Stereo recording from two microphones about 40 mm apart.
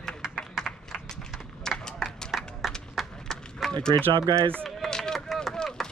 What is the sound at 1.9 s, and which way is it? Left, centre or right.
Clapping, centre.